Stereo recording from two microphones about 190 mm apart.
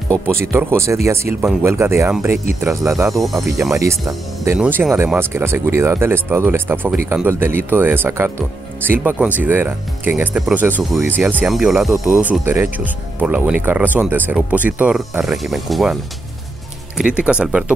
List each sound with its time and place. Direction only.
0.3 s speech: 15° right (ahead or behind)
3.1 s speech: centre (ahead or behind)
3.7 s speech: 15° right (ahead or behind)